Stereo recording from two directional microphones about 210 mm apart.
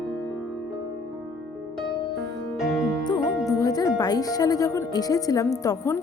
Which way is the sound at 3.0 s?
20° left (ahead or behind).